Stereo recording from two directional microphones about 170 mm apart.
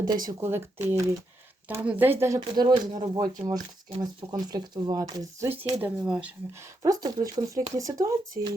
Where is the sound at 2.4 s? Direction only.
25° right (ahead or behind).